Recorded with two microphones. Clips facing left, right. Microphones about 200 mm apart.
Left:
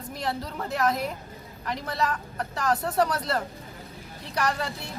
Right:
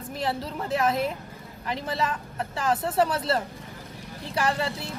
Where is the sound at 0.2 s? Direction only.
5° right (ahead or behind).